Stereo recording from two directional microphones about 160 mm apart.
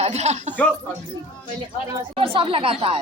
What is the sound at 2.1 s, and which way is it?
Speech, 35° right (ahead or behind).